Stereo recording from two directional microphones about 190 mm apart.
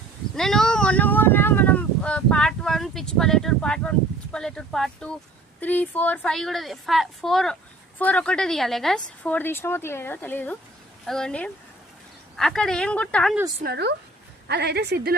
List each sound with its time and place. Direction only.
0.3 s a woman's voice: centre (ahead or behind)
13.6 s a woman's voice: 55° right (ahead or behind)